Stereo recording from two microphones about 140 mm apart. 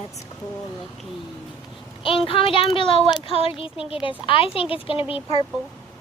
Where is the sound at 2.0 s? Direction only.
40° left (ahead or behind).